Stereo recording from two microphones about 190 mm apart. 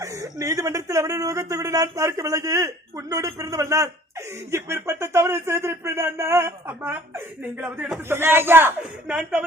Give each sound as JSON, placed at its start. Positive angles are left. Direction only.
{"t": 0.0, "sound": "speech", "side_deg": -15}